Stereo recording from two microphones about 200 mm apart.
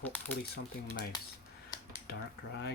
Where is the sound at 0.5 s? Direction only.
50° left (ahead or behind).